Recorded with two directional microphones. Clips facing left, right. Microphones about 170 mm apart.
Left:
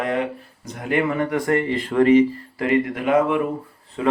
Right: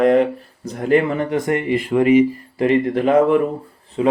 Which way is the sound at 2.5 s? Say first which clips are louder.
Right 4 dB; 25° right (ahead or behind).